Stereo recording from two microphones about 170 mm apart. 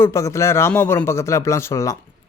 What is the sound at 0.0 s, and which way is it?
Speech, 15° left (ahead or behind).